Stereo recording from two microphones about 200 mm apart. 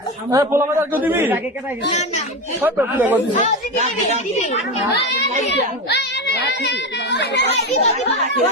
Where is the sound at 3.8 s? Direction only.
35° right (ahead or behind).